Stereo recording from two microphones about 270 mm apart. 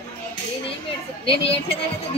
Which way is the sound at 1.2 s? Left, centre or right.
Centre.